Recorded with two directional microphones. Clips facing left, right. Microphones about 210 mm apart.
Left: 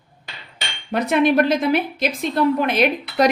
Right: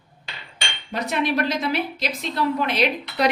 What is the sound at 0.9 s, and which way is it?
A woman's voice, 55° left (ahead or behind).